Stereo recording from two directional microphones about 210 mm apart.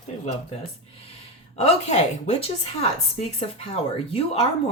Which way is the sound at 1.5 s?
30° left (ahead or behind).